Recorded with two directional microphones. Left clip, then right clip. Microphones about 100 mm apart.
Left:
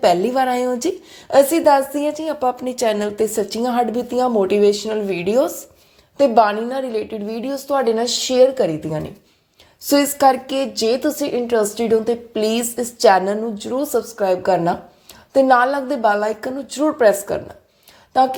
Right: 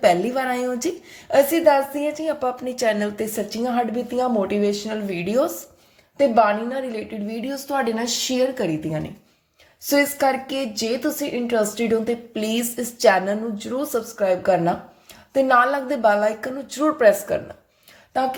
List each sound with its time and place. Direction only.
0.0 s a woman's voice: 30° left (ahead or behind)
7.3 s speech: 15° left (ahead or behind)
9.8 s a woman's voice: 30° left (ahead or behind)